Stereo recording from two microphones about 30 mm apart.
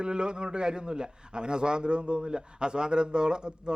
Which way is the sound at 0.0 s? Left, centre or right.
Right.